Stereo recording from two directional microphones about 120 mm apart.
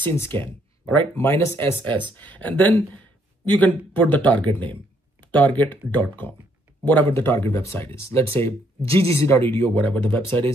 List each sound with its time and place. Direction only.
0.0 s speech: 20° left (ahead or behind)